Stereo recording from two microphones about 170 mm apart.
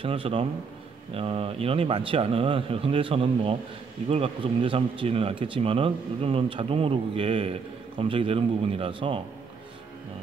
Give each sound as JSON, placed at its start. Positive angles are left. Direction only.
{"t": 0.0, "sound": "speech", "side_deg": -35}